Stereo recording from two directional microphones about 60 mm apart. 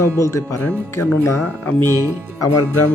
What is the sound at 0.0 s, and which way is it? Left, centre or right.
Speech, left.